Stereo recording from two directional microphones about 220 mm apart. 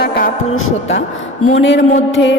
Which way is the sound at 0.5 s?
70° left (ahead or behind).